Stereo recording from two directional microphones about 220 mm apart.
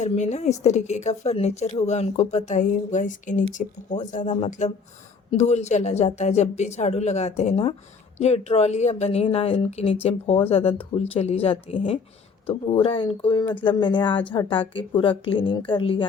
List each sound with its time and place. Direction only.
0.0 s a woman's voice: 30° left (ahead or behind)